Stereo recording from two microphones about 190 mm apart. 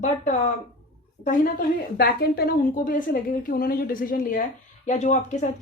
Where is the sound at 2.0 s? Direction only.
50° left (ahead or behind).